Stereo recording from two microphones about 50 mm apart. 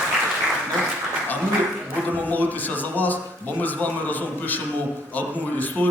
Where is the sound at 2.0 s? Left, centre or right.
Left.